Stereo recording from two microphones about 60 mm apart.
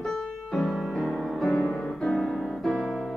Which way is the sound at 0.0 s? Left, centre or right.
Centre.